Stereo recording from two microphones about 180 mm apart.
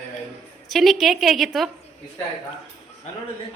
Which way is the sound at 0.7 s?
Centre (ahead or behind).